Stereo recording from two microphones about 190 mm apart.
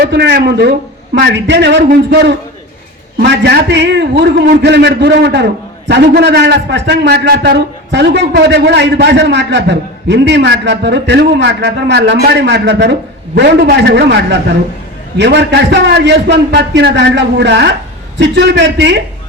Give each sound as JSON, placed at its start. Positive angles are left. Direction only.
{"t": 0.1, "sound": "a man's voice", "side_deg": -60}
{"t": 15.2, "sound": "a man's voice", "side_deg": -65}